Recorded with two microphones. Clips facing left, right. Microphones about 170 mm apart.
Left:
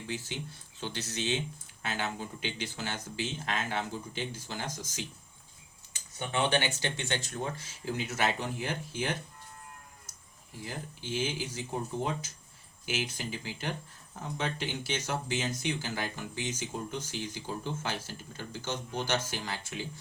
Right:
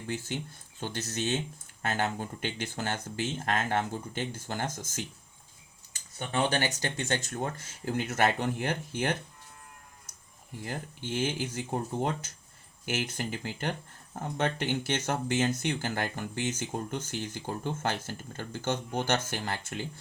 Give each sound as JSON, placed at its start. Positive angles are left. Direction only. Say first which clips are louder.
{"t": 0.1, "sound": "speech", "louder": "right 4 dB", "side_deg": -50}
{"t": 6.1, "sound": "speech", "louder": "right 1 dB", "side_deg": -40}
{"t": 10.7, "sound": "speech", "louder": "right 2 dB", "side_deg": -55}